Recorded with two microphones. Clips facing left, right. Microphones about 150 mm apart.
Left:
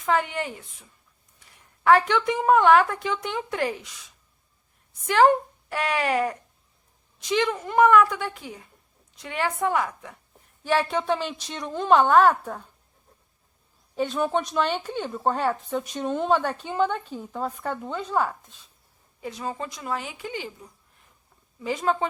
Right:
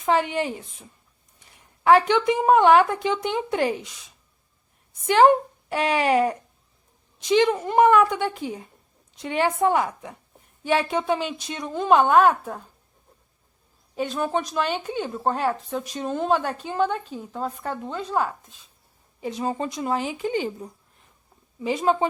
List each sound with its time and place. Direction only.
0.0 s a woman's voice: 25° right (ahead or behind)
5.0 s a woman's voice: 20° right (ahead or behind)
13.9 s speech: 5° right (ahead or behind)
19.2 s a woman's voice: 25° right (ahead or behind)
21.6 s a woman's voice: 20° right (ahead or behind)